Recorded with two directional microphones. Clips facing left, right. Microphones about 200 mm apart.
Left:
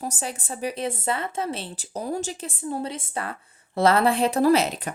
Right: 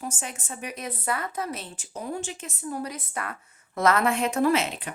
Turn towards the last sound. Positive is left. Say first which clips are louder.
# left 4 dB
turn(degrees=35)  # may be behind; listen again after turning